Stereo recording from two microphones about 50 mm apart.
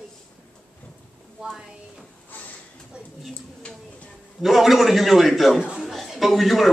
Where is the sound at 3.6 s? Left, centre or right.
Left.